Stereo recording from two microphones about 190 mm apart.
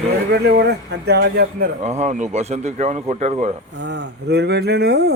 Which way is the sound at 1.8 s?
35° right (ahead or behind).